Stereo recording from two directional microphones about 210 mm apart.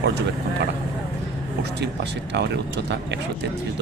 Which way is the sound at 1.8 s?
55° right (ahead or behind).